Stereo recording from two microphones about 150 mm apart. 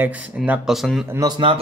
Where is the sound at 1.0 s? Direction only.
25° right (ahead or behind).